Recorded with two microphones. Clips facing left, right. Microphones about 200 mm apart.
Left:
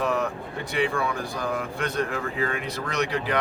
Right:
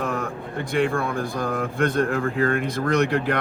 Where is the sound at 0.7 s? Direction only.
50° right (ahead or behind).